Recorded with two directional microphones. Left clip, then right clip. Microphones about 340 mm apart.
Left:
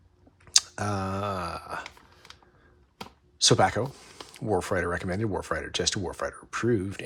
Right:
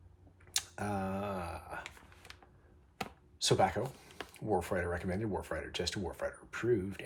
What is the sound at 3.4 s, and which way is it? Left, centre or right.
Speech, centre.